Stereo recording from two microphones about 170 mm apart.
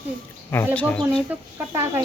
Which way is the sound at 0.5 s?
10° left (ahead or behind).